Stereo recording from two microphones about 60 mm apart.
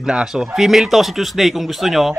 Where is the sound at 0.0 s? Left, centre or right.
Centre.